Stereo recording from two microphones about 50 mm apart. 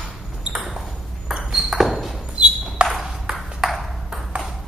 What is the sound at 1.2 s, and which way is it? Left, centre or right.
Ping, centre.